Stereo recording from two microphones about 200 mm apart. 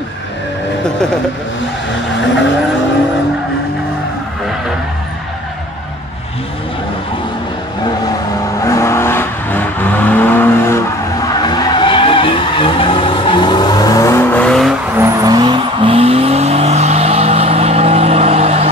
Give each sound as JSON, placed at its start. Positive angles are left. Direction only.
{"t": 8.6, "sound": "vehicle", "side_deg": 15}
{"t": 11.4, "sound": "vehicle", "side_deg": 20}
{"t": 15.0, "sound": "vehicle", "side_deg": -20}